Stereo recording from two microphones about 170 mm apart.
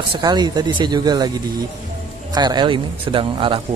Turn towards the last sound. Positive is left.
turn(degrees=-30)  # may be behind; listen again after turning